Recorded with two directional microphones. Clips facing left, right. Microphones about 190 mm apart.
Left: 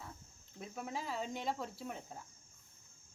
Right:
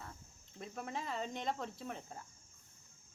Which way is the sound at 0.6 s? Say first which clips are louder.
Even; 5° left (ahead or behind).